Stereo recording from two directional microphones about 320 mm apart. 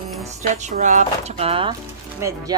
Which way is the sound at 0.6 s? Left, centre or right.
Right.